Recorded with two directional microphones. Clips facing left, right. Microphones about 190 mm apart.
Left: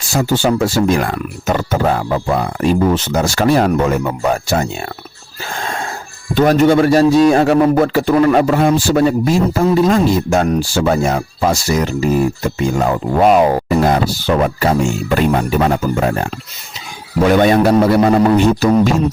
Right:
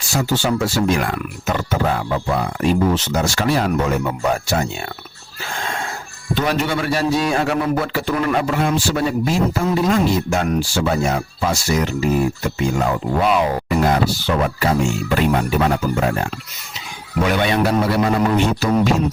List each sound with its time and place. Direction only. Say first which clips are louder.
0.1 s a man's voice: left 4 dB; 45° left (ahead or behind)
6.3 s a man's voice: left 9 dB; 45° left (ahead or behind)
17.2 s speech: left 7 dB; 45° left (ahead or behind)